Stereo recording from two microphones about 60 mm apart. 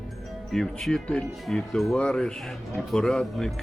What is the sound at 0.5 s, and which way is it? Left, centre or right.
Speech, centre.